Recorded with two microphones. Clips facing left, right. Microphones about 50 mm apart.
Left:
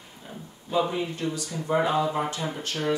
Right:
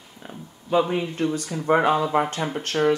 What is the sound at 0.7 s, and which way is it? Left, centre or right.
Speech, right.